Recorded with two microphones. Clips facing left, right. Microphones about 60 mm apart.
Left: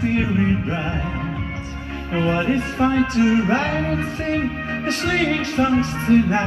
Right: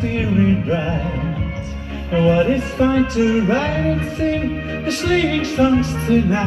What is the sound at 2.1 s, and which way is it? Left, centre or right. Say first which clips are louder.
Music: right 5 dB; centre.